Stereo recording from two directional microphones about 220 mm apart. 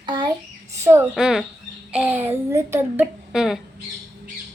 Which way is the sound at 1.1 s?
Centre (ahead or behind).